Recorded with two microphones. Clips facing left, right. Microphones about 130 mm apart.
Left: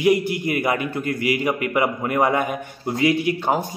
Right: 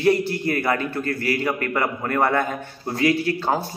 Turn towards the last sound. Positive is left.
turn(degrees=15)  # may be behind; listen again after turning